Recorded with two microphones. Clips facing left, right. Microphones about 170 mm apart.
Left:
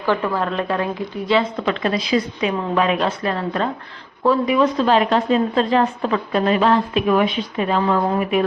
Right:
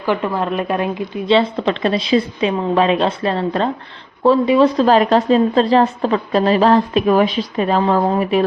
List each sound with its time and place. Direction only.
0.0 s a woman's voice: 15° right (ahead or behind); by 8.4 s 35° right (ahead or behind)